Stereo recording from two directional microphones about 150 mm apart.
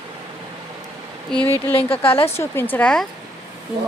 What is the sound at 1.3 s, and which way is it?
Speech, 5° left (ahead or behind).